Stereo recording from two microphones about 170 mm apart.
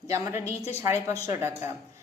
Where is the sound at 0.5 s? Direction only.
40° left (ahead or behind).